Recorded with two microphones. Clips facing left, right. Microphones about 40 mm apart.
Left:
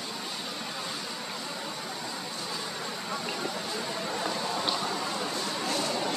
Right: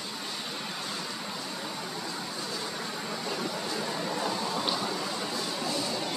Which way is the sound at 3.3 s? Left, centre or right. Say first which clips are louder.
Even; centre.